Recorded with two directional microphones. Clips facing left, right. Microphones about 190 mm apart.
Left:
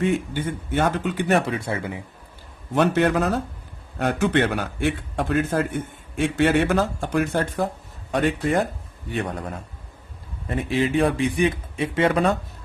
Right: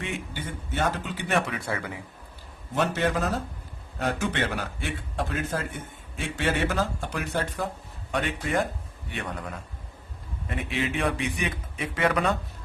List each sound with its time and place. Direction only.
0.0 s a man's voice: 50° left (ahead or behind)
1.3 s speech: 30° left (ahead or behind)
2.7 s a man's voice: 60° left (ahead or behind); by 12.3 s 25° left (ahead or behind)